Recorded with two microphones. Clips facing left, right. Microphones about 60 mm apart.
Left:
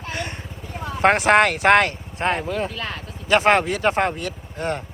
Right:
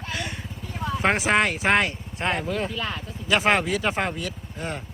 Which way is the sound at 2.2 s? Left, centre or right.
Left.